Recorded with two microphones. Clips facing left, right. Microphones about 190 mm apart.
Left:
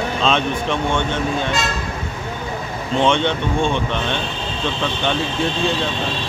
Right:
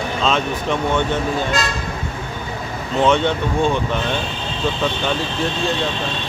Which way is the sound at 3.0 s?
5° right (ahead or behind).